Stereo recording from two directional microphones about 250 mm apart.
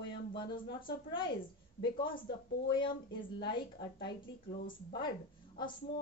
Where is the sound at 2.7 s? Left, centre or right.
Centre.